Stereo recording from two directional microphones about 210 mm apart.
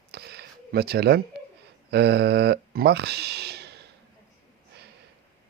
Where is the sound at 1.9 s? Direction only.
50° right (ahead or behind).